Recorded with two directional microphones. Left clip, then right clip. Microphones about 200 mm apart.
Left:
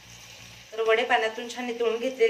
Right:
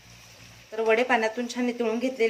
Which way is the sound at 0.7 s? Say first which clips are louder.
Even; 50° right (ahead or behind).